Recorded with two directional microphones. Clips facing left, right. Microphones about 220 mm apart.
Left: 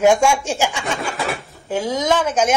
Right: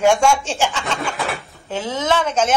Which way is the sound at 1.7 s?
10° left (ahead or behind).